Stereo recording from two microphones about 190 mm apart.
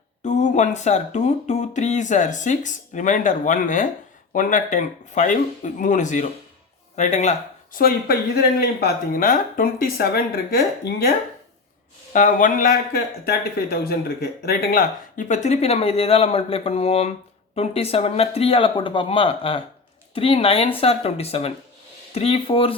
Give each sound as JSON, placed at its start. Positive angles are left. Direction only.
{"t": 0.3, "sound": "speech", "side_deg": 40}
{"t": 12.1, "sound": "speech", "side_deg": 45}
{"t": 13.2, "sound": "speech", "side_deg": 55}